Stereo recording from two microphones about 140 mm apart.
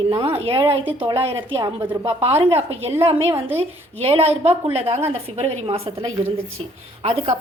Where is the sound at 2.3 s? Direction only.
15° right (ahead or behind).